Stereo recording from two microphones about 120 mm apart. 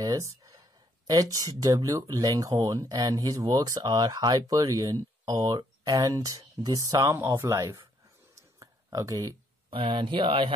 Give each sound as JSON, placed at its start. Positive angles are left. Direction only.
{"t": 0.0, "sound": "speech", "side_deg": -30}
{"t": 8.4, "sound": "a sound", "side_deg": -30}
{"t": 9.7, "sound": "speech", "side_deg": -45}